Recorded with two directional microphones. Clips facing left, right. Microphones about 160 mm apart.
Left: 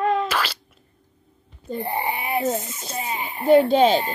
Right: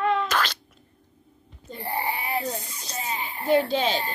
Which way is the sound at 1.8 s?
20° left (ahead or behind).